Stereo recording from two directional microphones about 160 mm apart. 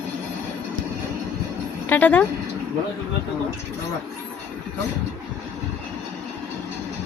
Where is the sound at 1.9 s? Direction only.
10° left (ahead or behind).